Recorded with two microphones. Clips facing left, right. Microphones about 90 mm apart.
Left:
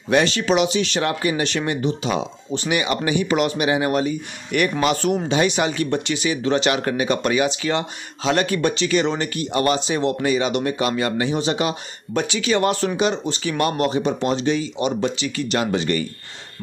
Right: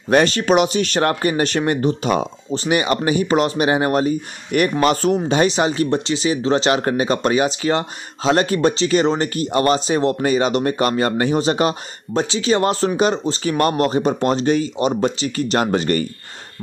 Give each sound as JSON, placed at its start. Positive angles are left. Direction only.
{"t": 0.1, "sound": "speech", "side_deg": -45}